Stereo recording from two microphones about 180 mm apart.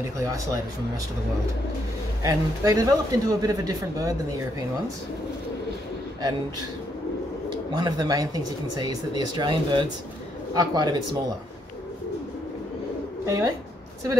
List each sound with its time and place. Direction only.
0.2 s speech: 20° right (ahead or behind)
2.2 s speech: 20° right (ahead or behind)
7.4 s speech: 20° right (ahead or behind)
13.2 s speech: 15° right (ahead or behind)